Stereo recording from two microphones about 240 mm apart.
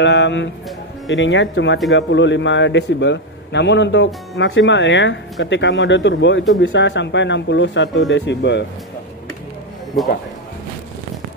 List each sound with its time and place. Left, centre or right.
0.0 s a man's voice: left
9.9 s a man's voice: centre